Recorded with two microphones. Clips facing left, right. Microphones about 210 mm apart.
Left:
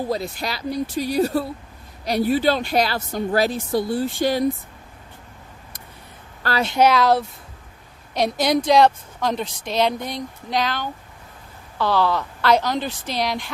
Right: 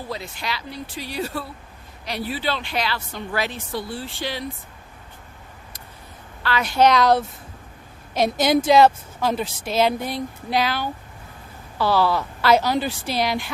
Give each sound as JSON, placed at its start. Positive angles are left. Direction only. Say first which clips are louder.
{"t": 0.1, "sound": "a woman's voice", "louder": "left 5 dB", "side_deg": 40}
{"t": 6.7, "sound": "a woman's voice", "louder": "even", "side_deg": 5}